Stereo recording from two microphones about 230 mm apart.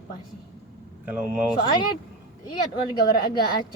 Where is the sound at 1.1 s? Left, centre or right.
Centre.